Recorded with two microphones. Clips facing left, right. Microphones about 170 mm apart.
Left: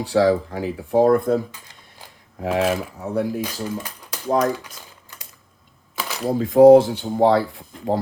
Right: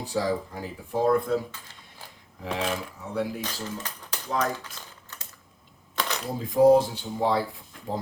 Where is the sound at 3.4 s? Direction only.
10° left (ahead or behind).